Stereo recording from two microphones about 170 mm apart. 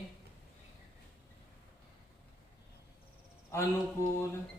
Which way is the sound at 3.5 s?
15° left (ahead or behind).